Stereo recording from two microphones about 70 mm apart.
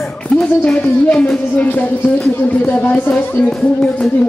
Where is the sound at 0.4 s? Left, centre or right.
Centre.